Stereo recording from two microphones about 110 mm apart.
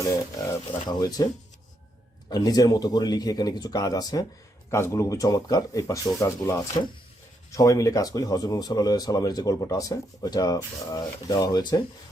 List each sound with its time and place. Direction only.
0.4 s speech: 35° left (ahead or behind)
2.3 s speech: 35° left (ahead or behind)